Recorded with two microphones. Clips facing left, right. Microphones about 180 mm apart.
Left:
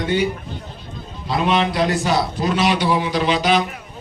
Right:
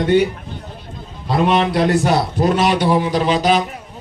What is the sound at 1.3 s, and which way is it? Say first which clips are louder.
A man's voice: right 3 dB; 50° right (ahead or behind).